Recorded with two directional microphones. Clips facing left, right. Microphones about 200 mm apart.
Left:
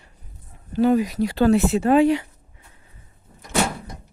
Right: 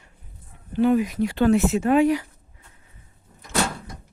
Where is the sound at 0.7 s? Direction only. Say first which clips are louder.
Left 1 dB; 35° left (ahead or behind).